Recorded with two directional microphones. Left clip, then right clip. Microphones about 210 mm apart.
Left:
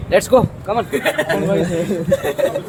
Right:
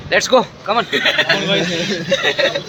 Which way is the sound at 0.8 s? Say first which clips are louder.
Right 5 dB; 10° left (ahead or behind).